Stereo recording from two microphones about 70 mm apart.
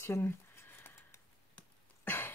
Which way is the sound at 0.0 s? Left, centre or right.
Left.